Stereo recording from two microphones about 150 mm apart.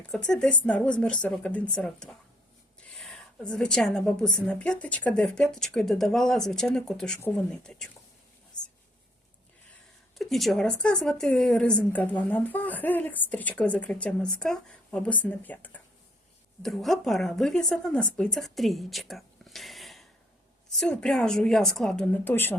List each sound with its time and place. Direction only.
0.1 s a woman's voice: 5° left (ahead or behind)
8.6 s a sound: 30° left (ahead or behind)
10.2 s a woman's voice: centre (ahead or behind)